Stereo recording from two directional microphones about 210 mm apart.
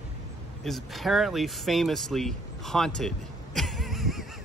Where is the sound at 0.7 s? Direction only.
Centre (ahead or behind).